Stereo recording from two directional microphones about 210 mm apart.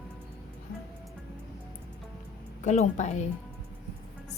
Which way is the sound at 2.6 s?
35° left (ahead or behind).